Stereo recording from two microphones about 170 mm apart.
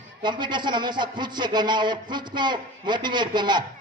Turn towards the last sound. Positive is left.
turn(degrees=-25)  # may be behind; listen again after turning